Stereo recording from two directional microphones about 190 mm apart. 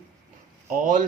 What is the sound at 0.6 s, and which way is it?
Speech, 45° right (ahead or behind).